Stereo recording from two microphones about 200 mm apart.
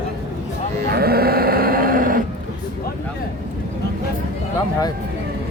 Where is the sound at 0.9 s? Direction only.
50° right (ahead or behind).